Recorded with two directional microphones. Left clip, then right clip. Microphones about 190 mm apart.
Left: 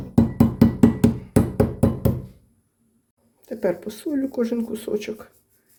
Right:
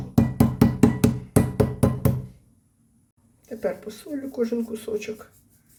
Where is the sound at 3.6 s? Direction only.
45° left (ahead or behind).